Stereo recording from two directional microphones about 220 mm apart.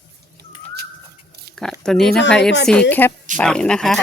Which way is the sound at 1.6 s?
5° left (ahead or behind).